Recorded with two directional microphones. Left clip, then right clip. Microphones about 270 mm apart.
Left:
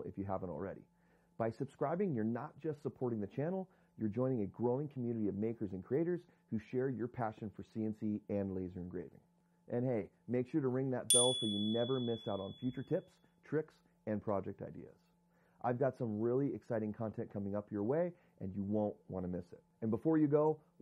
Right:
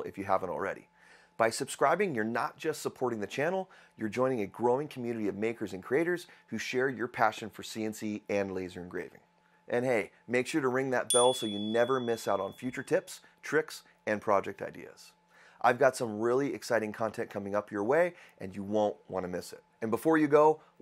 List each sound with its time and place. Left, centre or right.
0.0 s speech: centre
2.9 s speech: centre
3.2 s speech: centre